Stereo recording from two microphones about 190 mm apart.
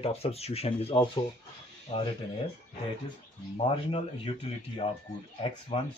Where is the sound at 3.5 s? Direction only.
30° left (ahead or behind).